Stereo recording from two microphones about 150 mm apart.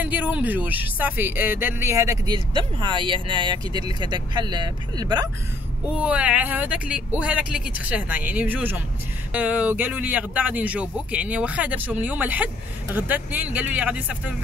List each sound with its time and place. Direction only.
0.0 s speech: 10° right (ahead or behind)
2.3 s speech: 30° right (ahead or behind)
5.9 s speech: 10° right (ahead or behind)